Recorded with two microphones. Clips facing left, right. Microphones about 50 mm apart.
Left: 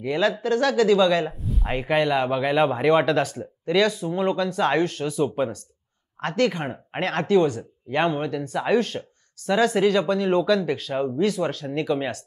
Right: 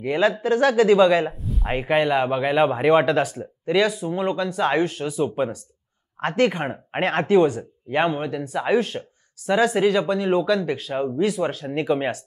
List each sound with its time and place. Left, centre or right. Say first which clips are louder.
0.0 s speech: right 2 dB; centre
1.3 s a sound: even; centre
1.7 s speech: right 2 dB; centre
6.2 s speech: right 2 dB; right